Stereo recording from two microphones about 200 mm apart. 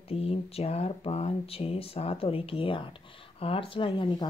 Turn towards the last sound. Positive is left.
turn(degrees=25)  # may be behind; listen again after turning